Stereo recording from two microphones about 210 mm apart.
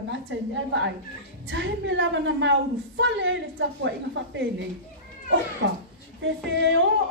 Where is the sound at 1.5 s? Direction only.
60° right (ahead or behind).